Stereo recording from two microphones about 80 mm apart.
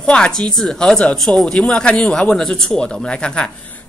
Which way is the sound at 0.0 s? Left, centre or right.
Centre.